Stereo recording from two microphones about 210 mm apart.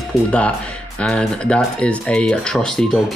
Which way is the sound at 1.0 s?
5° left (ahead or behind).